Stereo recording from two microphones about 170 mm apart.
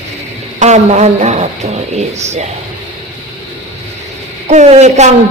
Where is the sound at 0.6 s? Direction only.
45° right (ahead or behind).